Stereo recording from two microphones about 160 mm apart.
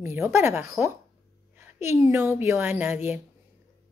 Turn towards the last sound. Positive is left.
turn(degrees=-15)  # may be behind; listen again after turning